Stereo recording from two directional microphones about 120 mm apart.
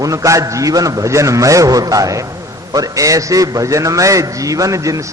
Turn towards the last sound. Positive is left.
turn(degrees=-25)  # may be behind; listen again after turning